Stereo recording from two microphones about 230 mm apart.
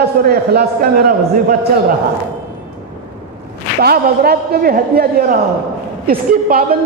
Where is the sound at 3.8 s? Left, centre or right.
Right.